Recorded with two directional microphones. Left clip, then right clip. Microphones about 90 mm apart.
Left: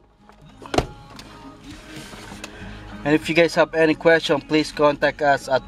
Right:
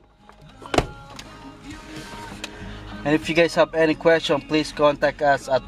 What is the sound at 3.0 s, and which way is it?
Speech, 25° left (ahead or behind).